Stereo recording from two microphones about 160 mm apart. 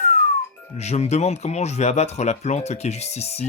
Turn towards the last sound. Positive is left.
turn(degrees=40)  # may be behind; listen again after turning